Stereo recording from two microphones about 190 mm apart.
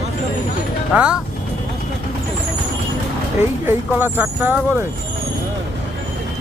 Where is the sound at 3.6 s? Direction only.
10° right (ahead or behind).